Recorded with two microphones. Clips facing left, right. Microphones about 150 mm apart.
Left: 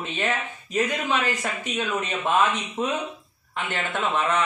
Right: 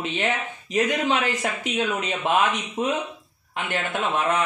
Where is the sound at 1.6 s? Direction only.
20° right (ahead or behind).